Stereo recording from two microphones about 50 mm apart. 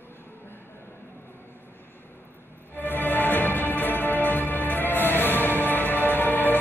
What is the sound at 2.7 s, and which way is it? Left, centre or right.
Music, left.